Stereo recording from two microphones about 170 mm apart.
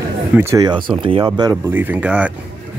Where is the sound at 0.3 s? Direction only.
15° right (ahead or behind).